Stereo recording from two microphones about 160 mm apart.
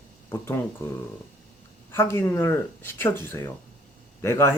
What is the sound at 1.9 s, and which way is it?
Speech, 15° left (ahead or behind).